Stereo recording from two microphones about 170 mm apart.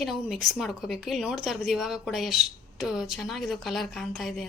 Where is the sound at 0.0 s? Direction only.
Centre (ahead or behind).